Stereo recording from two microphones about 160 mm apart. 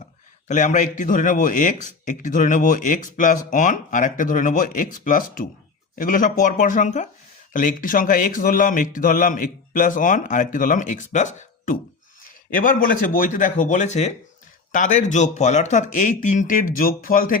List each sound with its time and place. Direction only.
0.4 s speech: 50° left (ahead or behind)